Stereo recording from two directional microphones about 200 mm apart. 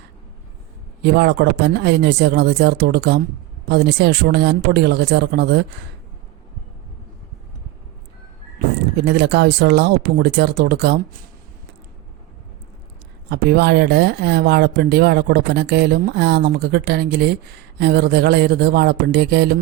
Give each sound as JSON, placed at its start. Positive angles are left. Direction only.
{"t": 1.0, "sound": "speech", "side_deg": -55}
{"t": 9.0, "sound": "speech", "side_deg": -55}
{"t": 13.3, "sound": "speech", "side_deg": -55}